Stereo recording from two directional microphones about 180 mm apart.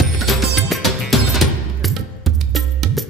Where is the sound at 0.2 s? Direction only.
Centre (ahead or behind).